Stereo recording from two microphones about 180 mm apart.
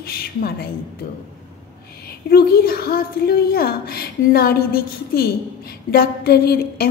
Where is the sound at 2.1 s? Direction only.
60° left (ahead or behind).